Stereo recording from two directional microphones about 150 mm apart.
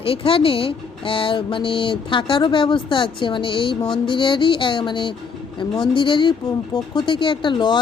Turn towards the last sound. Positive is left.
turn(degrees=30)  # may be behind; listen again after turning